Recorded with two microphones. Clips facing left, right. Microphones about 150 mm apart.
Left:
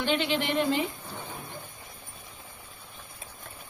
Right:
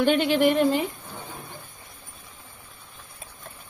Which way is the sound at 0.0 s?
50° right (ahead or behind).